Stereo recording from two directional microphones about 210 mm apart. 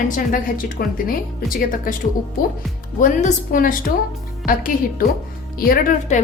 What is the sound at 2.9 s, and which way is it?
A woman's voice, 40° left (ahead or behind).